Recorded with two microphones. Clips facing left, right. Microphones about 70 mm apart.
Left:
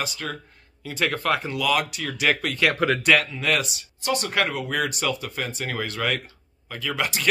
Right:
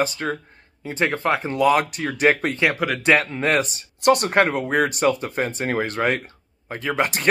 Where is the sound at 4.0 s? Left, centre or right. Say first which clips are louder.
Right 8 dB; right.